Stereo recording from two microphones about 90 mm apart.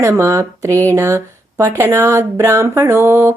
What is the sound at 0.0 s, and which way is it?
Speech, 35° right (ahead or behind).